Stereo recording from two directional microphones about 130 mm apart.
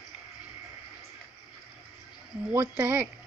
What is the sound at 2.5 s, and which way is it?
Speech, 20° right (ahead or behind).